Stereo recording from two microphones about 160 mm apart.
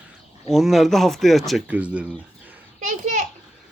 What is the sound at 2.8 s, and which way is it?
Children playing, 50° right (ahead or behind).